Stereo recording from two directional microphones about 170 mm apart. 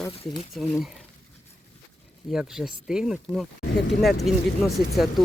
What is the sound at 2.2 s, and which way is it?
Speech, 5° right (ahead or behind).